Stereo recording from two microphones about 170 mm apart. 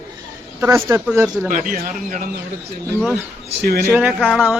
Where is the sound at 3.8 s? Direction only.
10° right (ahead or behind).